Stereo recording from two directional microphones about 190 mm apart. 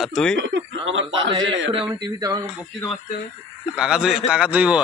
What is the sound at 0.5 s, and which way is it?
Speech, 85° right.